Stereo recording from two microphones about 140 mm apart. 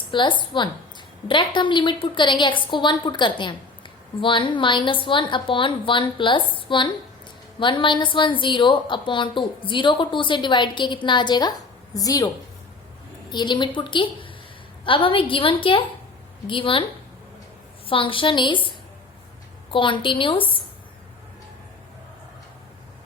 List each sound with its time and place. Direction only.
0.1 s a woman's voice: 35° left (ahead or behind)
13.3 s a woman's voice: 35° left (ahead or behind)
17.8 s a woman's voice: 40° left (ahead or behind)
19.7 s a woman's voice: 35° left (ahead or behind)